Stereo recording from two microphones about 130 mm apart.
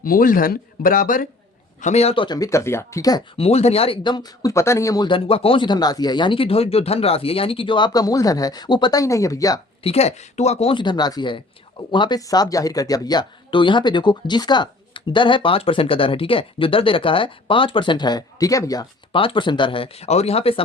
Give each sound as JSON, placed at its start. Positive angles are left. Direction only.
{"t": 0.0, "sound": "speech", "side_deg": 90}
{"t": 1.8, "sound": "speech", "side_deg": 55}
{"t": 2.2, "sound": "speech", "side_deg": 30}
{"t": 3.3, "sound": "speech", "side_deg": 50}
{"t": 5.0, "sound": "speech", "side_deg": 45}
{"t": 9.8, "sound": "speech", "side_deg": 55}
{"t": 19.1, "sound": "speech", "side_deg": 40}